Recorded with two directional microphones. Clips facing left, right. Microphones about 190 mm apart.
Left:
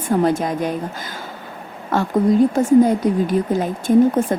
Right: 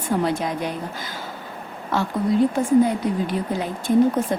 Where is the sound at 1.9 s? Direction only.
50° left (ahead or behind).